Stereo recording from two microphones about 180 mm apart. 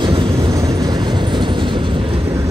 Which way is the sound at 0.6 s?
20° right (ahead or behind).